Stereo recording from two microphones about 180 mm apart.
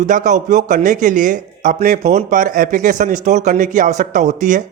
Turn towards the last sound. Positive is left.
turn(degrees=-45)  # may be behind; listen again after turning